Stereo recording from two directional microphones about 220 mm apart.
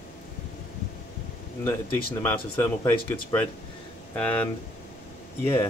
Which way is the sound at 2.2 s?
10° left (ahead or behind).